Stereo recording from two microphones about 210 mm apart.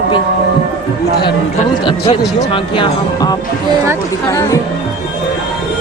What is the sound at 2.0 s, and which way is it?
Speech, 25° left (ahead or behind).